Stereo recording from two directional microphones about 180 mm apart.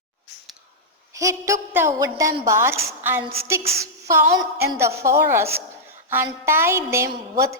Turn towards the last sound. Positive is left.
turn(degrees=-15)  # may be behind; listen again after turning